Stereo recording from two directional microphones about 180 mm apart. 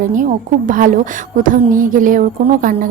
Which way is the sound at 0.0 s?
45° right (ahead or behind).